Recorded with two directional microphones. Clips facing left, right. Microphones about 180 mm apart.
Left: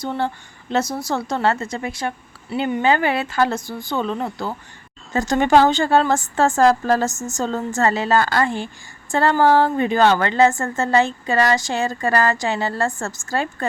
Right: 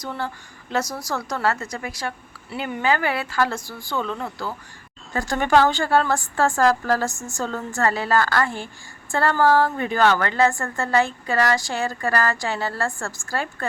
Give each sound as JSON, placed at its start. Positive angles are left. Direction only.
{"t": 0.0, "sound": "a woman's voice", "side_deg": 25}